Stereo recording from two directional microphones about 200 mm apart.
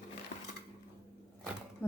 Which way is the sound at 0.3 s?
45° left (ahead or behind).